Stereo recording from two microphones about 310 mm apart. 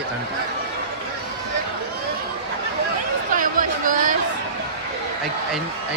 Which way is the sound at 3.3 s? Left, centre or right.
Right.